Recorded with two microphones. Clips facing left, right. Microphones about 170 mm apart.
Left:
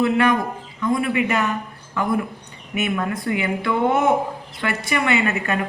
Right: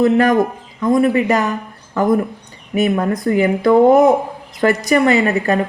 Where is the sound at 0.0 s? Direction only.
40° right (ahead or behind).